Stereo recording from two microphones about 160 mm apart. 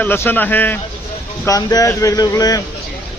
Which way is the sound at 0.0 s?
15° left (ahead or behind).